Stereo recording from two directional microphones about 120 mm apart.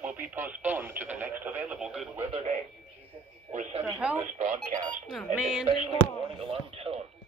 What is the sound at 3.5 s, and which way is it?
Speech, 90° right.